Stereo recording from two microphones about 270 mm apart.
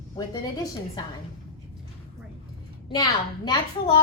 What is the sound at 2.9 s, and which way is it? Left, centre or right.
A woman's voice, centre.